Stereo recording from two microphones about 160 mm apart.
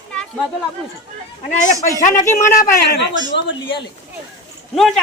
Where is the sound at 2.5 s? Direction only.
65° left (ahead or behind).